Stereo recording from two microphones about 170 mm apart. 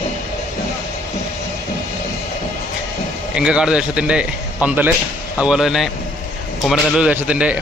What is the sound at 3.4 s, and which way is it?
A man's voice, 5° right (ahead or behind).